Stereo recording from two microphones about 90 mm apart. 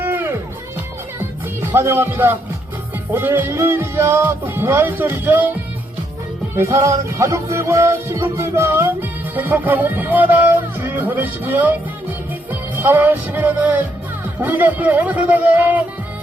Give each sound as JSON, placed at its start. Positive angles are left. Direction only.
{"t": 0.0, "sound": "music", "side_deg": -25}
{"t": 1.7, "sound": "music", "side_deg": -25}
{"t": 6.6, "sound": "music", "side_deg": -30}